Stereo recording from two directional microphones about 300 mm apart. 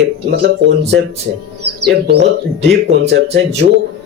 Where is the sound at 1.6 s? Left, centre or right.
Right.